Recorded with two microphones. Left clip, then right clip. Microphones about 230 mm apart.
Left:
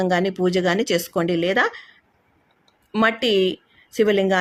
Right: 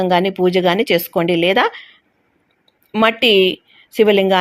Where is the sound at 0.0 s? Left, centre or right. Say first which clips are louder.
Right 5 dB; centre.